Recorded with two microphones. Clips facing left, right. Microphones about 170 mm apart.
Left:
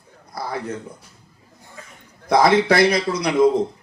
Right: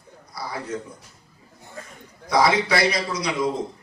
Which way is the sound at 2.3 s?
55° left (ahead or behind).